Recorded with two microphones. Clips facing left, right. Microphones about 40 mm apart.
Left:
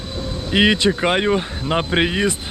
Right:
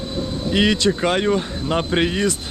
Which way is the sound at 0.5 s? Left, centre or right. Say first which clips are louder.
Left 2 dB; left.